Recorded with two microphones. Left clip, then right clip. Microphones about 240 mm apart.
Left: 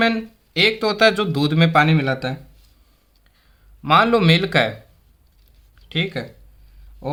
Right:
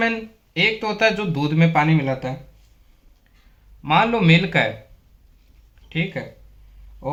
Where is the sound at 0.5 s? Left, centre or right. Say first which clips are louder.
Left 3 dB; left.